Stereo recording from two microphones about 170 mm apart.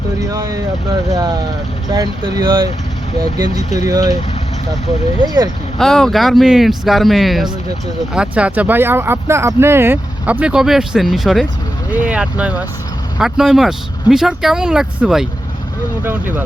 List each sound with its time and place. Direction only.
0.2 s speech: 20° right (ahead or behind)
1.9 s speech: 20° right (ahead or behind)
5.2 s speech: 20° right (ahead or behind)
5.8 s speech: centre (ahead or behind)